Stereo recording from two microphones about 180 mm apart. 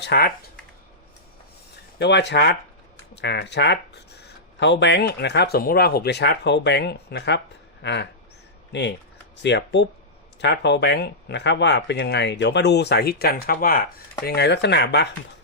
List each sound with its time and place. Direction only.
0.0 s speech: 60° left (ahead or behind)
2.0 s speech: 70° left (ahead or behind); by 13.8 s 55° left (ahead or behind)
14.3 s speech: 65° left (ahead or behind)